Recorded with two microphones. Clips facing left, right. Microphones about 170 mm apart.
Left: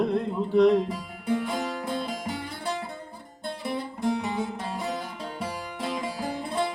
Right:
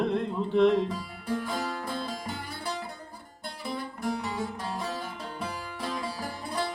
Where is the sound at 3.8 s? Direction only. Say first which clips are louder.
Left 4 dB; 20° left (ahead or behind).